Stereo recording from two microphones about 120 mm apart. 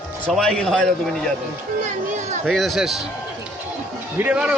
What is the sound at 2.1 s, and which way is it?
Speech, 80° right.